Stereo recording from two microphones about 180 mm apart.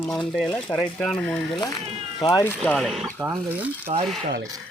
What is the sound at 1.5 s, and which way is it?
Speech, 20° left (ahead or behind).